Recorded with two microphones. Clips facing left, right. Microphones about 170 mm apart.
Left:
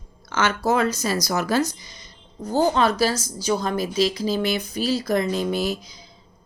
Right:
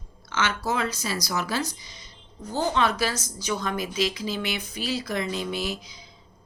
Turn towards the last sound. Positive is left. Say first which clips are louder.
# left 6 dB
turn(degrees=40)  # may be behind; listen again after turning